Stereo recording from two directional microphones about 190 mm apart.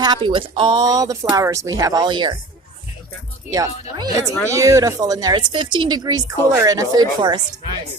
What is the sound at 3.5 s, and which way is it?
Speech, 20° right (ahead or behind).